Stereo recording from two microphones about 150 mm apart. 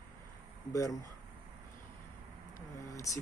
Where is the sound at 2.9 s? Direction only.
20° left (ahead or behind).